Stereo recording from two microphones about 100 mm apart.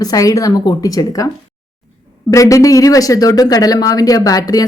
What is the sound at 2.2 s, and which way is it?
Speech, 35° left (ahead or behind).